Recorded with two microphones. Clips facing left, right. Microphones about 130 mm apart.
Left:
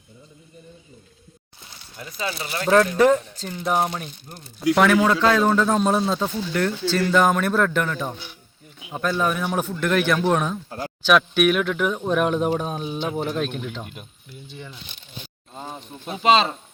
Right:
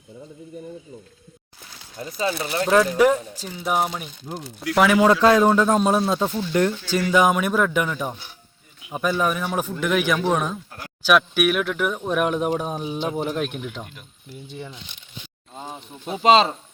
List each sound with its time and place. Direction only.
2.0 s speech: 30° right (ahead or behind)
2.6 s a man's voice: 5° right (ahead or behind)
4.3 s speech: 90° right
4.9 s a man's voice: 15° right (ahead or behind)
10.7 s speech: 30° left (ahead or behind)
11.0 s speech: 5° right (ahead or behind)
15.6 s speech: 10° right (ahead or behind)
16.2 s speech: 35° right (ahead or behind)